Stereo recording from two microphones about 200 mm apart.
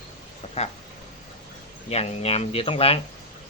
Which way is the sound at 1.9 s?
30° left (ahead or behind).